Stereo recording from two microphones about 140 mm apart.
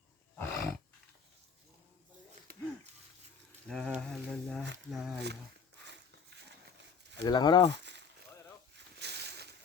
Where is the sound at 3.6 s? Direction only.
5° left (ahead or behind).